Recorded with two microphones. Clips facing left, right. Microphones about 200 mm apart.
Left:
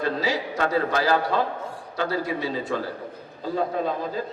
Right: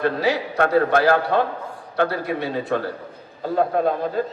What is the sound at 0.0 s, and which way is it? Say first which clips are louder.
A man's voice: right 4 dB; 60° right (ahead or behind).